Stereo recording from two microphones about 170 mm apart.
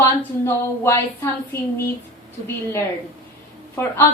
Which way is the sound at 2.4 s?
15° left (ahead or behind).